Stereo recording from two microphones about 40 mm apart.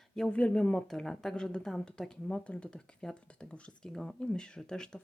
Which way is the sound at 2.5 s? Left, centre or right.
Left.